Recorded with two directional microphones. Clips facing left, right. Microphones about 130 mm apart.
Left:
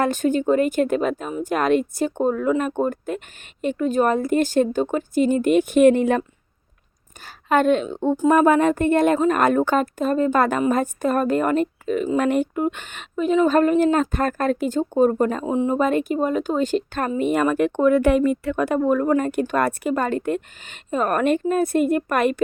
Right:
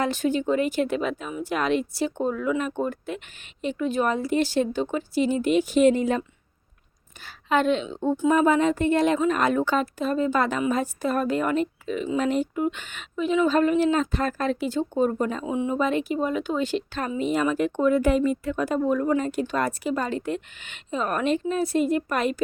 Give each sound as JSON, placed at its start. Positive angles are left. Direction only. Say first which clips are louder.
{"t": 0.0, "sound": "a woman's voice", "louder": "left 4 dB", "side_deg": 45}
{"t": 7.2, "sound": "a woman's voice", "louder": "left 4 dB", "side_deg": 45}
{"t": 8.1, "sound": "speech", "louder": "left 4 dB", "side_deg": 40}
{"t": 8.4, "sound": "a woman's voice", "louder": "left 4 dB", "side_deg": 55}